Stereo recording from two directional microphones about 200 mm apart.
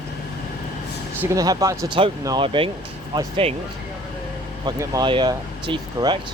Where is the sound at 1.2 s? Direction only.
15° right (ahead or behind).